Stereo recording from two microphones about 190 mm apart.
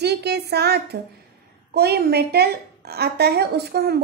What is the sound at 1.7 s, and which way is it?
A woman's voice, 55° right (ahead or behind).